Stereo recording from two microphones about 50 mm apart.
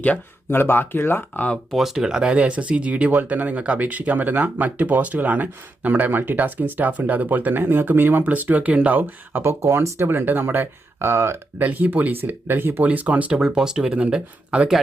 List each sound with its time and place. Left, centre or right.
0.5 s speech: left
1.7 s speech: centre
2.0 s speech: centre; by 8.2 s right
8.2 s speech: right
9.0 s speech: right
9.4 s speech: right
10.1 s speech: right
11.0 s speech: right
11.6 s speech: right
12.8 s speech: right
13.5 s speech: centre